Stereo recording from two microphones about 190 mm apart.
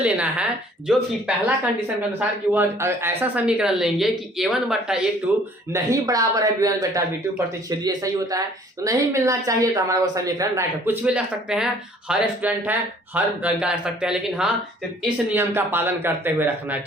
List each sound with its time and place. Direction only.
0.0 s speech: 5° right (ahead or behind)